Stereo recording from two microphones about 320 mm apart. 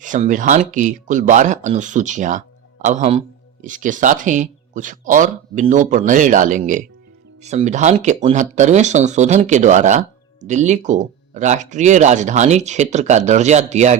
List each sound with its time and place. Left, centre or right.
0.0 s speech: right